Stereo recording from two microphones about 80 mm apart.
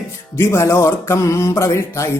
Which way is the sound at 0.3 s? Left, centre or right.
Left.